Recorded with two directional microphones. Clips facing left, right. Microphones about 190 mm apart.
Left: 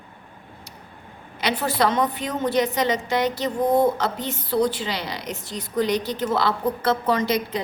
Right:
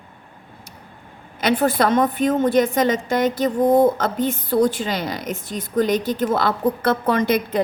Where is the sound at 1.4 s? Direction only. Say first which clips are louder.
Right 4 dB; 50° right (ahead or behind).